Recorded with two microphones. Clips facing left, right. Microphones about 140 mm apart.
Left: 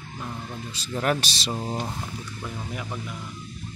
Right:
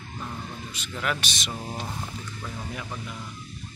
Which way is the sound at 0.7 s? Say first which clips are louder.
Left 6 dB; 35° left (ahead or behind).